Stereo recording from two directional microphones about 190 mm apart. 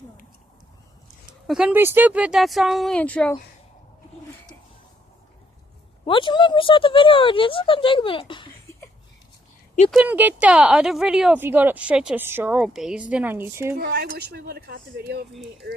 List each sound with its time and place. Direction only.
1.5 s speech: 5° right (ahead or behind)
6.1 s speech: 25° left (ahead or behind)
9.9 s a woman's voice: 10° right (ahead or behind)
13.7 s speech: 55° right (ahead or behind)